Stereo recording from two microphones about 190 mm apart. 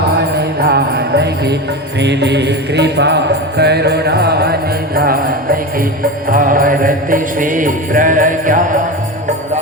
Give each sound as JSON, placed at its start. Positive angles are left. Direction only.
{"t": 0.6, "sound": "music", "side_deg": -60}